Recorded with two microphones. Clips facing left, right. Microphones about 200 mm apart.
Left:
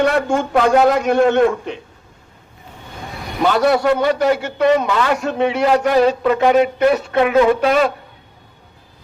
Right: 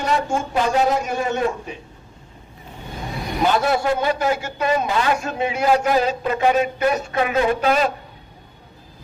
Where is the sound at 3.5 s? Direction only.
65° left (ahead or behind).